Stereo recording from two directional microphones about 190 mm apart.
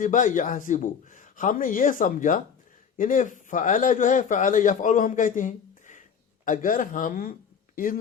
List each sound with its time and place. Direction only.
0.0 s a man's voice: 45° left (ahead or behind)